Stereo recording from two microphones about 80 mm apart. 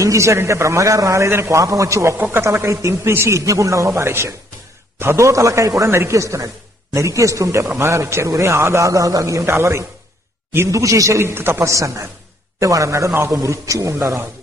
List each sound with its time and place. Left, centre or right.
0.0 s a man's voice: right
2.1 s a man's voice: right
11.2 s a man's voice: right